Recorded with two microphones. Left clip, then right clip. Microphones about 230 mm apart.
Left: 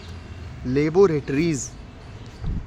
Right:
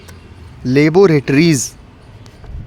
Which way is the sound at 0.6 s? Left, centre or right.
Right.